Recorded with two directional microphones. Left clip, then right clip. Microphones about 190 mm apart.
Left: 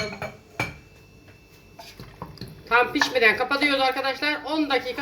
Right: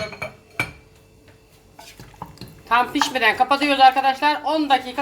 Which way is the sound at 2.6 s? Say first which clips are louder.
Right 2 dB; 50° right (ahead or behind).